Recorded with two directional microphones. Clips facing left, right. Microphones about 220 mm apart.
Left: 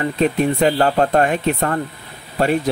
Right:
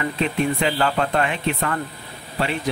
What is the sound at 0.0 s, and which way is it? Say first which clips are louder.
Speech: left 5 dB; 45° left (ahead or behind).